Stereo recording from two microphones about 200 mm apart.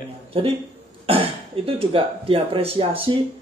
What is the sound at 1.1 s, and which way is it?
Speech, 25° right (ahead or behind).